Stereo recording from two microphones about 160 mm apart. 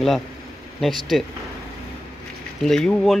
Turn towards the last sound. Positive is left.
turn(degrees=5)  # may be behind; listen again after turning